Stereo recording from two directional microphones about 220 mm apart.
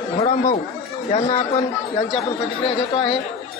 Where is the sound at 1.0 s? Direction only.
30° left (ahead or behind).